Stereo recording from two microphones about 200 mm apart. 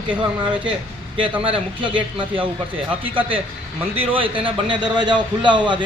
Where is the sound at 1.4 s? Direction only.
25° right (ahead or behind).